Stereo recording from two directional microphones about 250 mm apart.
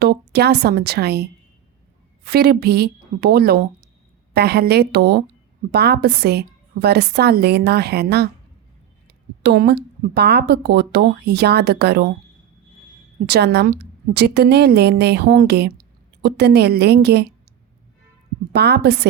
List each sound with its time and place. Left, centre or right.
0.0 s speech: right
13.2 s speech: right
18.5 s speech: right